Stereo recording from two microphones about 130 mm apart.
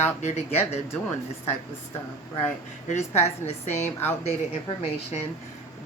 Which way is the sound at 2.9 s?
60° left (ahead or behind).